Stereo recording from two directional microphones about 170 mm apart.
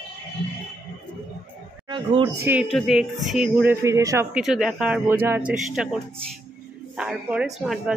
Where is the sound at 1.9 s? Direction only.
30° right (ahead or behind).